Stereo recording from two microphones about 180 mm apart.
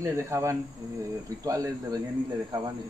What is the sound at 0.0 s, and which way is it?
Speech, 15° right (ahead or behind).